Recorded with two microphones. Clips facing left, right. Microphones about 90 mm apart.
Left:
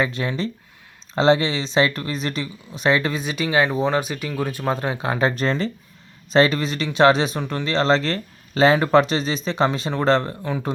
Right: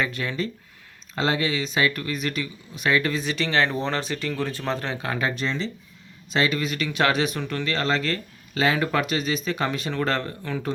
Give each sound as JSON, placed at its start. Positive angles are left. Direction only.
{"t": 0.0, "sound": "speech", "side_deg": 25}
{"t": 5.3, "sound": "speech", "side_deg": 45}